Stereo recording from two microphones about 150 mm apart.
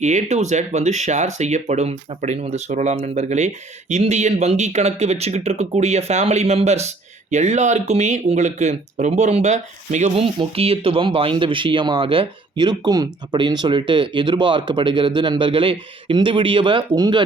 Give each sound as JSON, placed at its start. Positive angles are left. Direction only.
{"t": 0.0, "sound": "speech", "side_deg": -50}
{"t": 10.2, "sound": "speech", "side_deg": -40}